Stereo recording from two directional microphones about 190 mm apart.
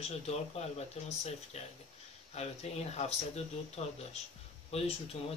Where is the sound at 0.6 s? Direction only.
35° left (ahead or behind).